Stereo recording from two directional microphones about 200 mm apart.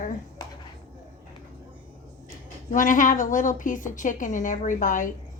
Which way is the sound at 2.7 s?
40° left (ahead or behind).